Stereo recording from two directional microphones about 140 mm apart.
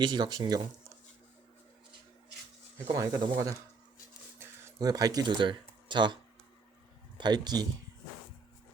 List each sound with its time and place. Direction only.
0.0 s speech: 30° right (ahead or behind)
2.7 s speech: 25° right (ahead or behind)
4.4 s a sound: 20° right (ahead or behind)
7.2 s speech: 30° right (ahead or behind)